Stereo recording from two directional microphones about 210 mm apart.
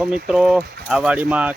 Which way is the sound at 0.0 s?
5° right (ahead or behind).